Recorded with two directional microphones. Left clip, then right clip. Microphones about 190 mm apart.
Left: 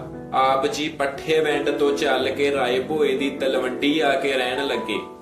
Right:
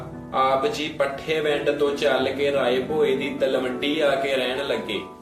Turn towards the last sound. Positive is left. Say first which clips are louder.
# left 2 dB
turn(degrees=30)  # may be behind; listen again after turning